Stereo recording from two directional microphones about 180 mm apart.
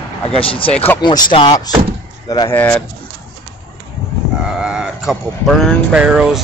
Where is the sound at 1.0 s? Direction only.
25° left (ahead or behind).